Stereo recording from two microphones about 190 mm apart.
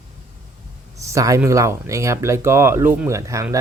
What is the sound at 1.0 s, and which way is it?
Speech, 15° right (ahead or behind).